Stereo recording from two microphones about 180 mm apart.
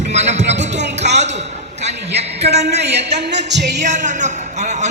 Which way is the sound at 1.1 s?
40° right (ahead or behind).